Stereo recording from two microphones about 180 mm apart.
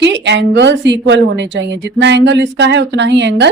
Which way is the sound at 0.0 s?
75° right (ahead or behind).